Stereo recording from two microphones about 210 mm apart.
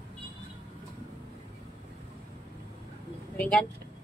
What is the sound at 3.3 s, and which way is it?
Speech, 5° left (ahead or behind).